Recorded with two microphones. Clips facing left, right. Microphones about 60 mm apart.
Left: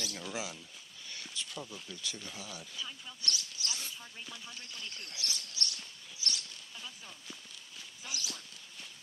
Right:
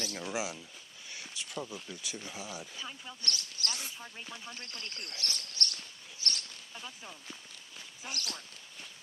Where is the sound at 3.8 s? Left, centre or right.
Right.